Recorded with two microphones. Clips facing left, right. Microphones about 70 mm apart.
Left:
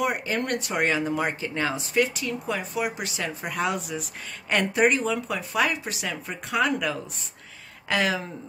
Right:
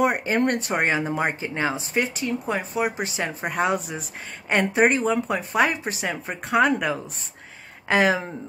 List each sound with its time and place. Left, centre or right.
0.0 s speech: right